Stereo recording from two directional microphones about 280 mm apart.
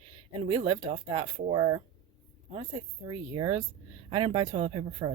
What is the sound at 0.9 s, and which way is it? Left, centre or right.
Speech, right.